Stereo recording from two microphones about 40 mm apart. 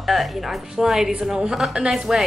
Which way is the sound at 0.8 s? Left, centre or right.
Centre.